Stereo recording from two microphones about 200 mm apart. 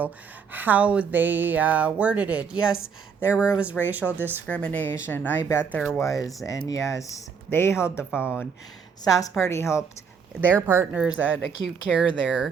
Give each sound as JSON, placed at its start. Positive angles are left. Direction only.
{"t": 0.5, "sound": "speech", "side_deg": -10}
{"t": 4.4, "sound": "speech", "side_deg": 5}
{"t": 8.1, "sound": "speech", "side_deg": -5}
{"t": 9.0, "sound": "speech", "side_deg": 15}
{"t": 10.8, "sound": "speech", "side_deg": -5}